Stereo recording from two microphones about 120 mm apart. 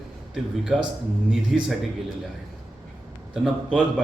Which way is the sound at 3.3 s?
5° right (ahead or behind).